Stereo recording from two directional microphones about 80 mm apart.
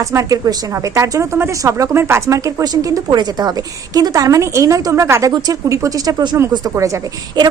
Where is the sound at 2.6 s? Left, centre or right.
Right.